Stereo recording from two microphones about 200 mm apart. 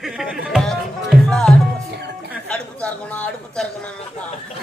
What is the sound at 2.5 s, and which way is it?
Speech, 5° left (ahead or behind).